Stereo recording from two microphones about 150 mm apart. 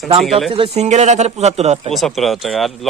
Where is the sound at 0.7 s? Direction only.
50° right (ahead or behind).